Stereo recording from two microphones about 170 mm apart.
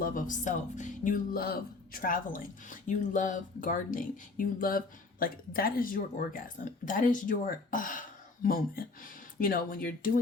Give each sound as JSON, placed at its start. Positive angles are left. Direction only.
{"t": 0.0, "sound": "speech", "side_deg": 50}